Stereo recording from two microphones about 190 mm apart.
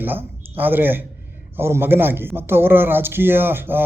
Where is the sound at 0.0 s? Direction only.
10° right (ahead or behind).